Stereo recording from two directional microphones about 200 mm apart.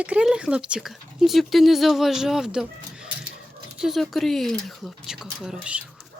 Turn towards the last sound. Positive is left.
turn(degrees=-5)  # may be behind; listen again after turning